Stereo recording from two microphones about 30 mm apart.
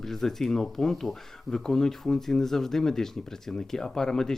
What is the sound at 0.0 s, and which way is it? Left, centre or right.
Speech, centre.